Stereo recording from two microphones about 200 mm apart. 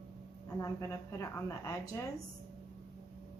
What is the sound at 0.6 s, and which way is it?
A woman's voice, 15° left (ahead or behind).